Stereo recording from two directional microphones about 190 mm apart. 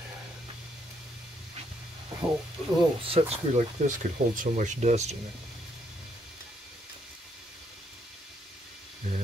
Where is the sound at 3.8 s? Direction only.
40° right (ahead or behind).